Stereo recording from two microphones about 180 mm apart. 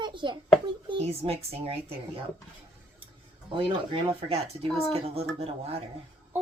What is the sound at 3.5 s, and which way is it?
A child's voice, 30° right (ahead or behind).